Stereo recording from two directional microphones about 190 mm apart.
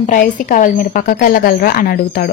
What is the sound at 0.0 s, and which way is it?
A woman's voice, 45° left (ahead or behind).